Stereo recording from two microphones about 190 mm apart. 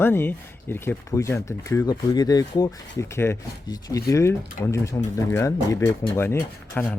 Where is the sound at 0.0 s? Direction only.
10° left (ahead or behind).